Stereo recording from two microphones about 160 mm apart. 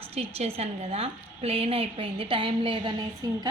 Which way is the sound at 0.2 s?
40° right (ahead or behind).